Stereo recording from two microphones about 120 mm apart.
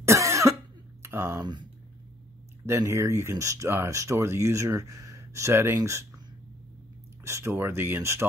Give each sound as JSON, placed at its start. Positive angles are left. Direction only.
{"t": 0.0, "sound": "cough", "side_deg": -25}
{"t": 1.0, "sound": "speech", "side_deg": -25}
{"t": 2.6, "sound": "speech", "side_deg": -20}
{"t": 7.2, "sound": "speech", "side_deg": -20}